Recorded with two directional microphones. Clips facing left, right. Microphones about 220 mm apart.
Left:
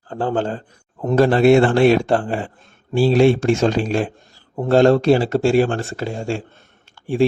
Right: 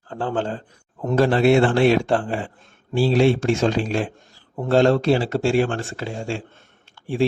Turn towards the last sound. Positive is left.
turn(degrees=45)  # may be behind; listen again after turning